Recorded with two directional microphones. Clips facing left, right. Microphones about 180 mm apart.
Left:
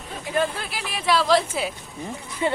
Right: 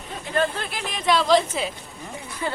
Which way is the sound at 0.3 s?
10° left (ahead or behind).